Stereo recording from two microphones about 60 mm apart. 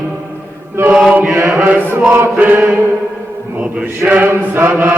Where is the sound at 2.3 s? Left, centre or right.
Right.